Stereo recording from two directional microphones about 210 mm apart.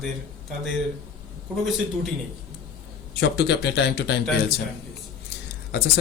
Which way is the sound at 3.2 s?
55° left (ahead or behind).